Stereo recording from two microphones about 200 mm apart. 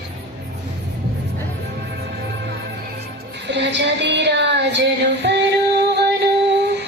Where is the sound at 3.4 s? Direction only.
60° right (ahead or behind).